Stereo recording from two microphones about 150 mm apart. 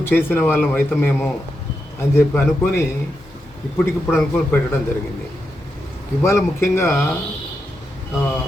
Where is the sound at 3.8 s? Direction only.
15° left (ahead or behind).